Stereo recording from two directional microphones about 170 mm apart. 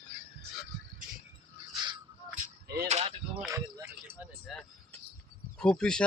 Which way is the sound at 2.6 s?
70° right (ahead or behind).